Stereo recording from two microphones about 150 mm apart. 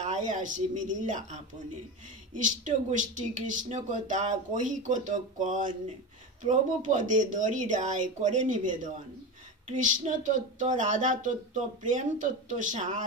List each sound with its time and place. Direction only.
0.0 s speech: 55° right (ahead or behind)